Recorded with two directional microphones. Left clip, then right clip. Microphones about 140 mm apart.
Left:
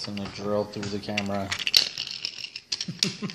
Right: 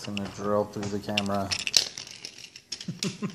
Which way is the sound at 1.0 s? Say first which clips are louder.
Right 2 dB; 30° right (ahead or behind).